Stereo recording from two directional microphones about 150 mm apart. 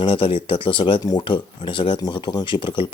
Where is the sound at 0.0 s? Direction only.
35° left (ahead or behind).